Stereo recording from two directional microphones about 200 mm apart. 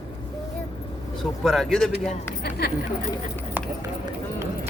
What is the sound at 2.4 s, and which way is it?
Speech, 50° left (ahead or behind).